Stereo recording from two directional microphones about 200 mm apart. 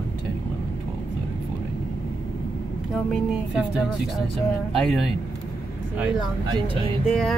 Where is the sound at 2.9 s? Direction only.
Centre (ahead or behind).